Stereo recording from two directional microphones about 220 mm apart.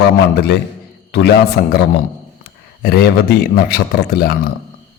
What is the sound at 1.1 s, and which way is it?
Speech, 50° left (ahead or behind).